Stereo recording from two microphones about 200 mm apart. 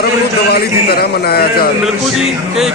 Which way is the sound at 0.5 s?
50° left (ahead or behind).